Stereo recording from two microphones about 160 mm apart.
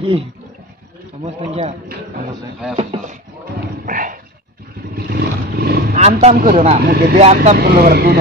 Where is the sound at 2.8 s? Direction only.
45° right (ahead or behind).